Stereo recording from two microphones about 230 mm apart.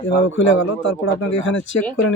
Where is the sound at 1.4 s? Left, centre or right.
Left.